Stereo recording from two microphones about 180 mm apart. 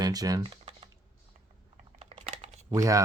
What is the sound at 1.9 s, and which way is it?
Typing, 35° right (ahead or behind).